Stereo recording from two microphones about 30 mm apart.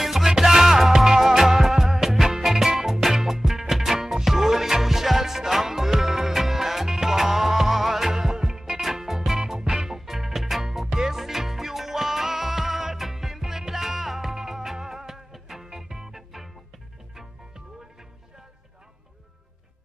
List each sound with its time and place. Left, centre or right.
0.0 s music: centre
8.4 s music: right
8.9 s music: centre
9.4 s music: right
16.2 s music: centre